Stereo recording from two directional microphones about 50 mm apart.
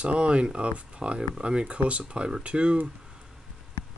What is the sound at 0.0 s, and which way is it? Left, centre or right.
Speech, right.